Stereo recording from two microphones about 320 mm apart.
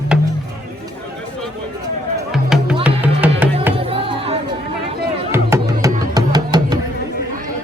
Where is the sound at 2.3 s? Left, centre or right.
Centre.